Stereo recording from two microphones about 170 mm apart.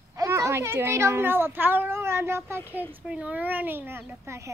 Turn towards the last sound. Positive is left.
turn(degrees=-15)  # may be behind; listen again after turning